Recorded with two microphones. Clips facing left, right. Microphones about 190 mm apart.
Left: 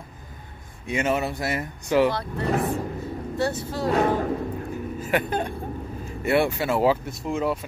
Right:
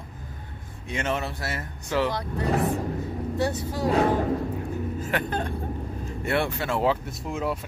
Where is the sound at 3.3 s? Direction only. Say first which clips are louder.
Left 1 dB; 15° right (ahead or behind).